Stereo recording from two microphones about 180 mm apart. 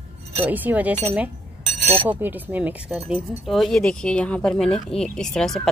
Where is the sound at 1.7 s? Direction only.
35° right (ahead or behind).